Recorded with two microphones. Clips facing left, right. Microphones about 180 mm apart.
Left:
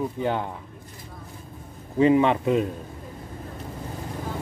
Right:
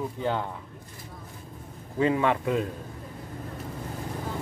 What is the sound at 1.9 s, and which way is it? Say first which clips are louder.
Speech: left 5 dB; 20° left (ahead or behind).